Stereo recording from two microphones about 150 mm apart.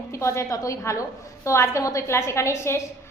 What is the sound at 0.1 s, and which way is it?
A woman's voice, 20° left (ahead or behind).